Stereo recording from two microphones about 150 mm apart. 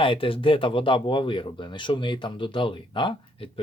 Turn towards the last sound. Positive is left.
turn(degrees=35)  # may be behind; listen again after turning